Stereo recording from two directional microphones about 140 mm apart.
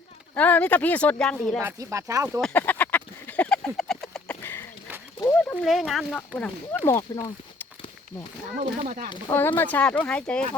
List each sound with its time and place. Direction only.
0.3 s speech: 10° left (ahead or behind)
1.6 s speech: 20° right (ahead or behind)
2.4 s a sound: 15° left (ahead or behind)
3.8 s chicken: 5° left (ahead or behind)
5.3 s a sound: 10° left (ahead or behind)
5.6 s speech: centre (ahead or behind)
8.8 s speech: 60° right (ahead or behind)
9.3 s speech: 15° left (ahead or behind)